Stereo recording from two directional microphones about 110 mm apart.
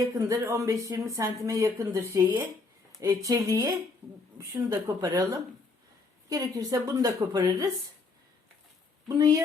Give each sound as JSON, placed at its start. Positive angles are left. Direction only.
{"t": 0.0, "sound": "speech", "side_deg": -30}
{"t": 4.7, "sound": "a woman's voice", "side_deg": -30}
{"t": 9.0, "sound": "a woman's voice", "side_deg": -35}